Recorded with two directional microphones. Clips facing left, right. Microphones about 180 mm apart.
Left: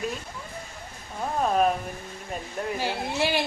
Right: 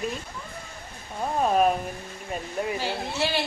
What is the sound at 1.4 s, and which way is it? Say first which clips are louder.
Speech: right 1 dB; 5° right (ahead or behind).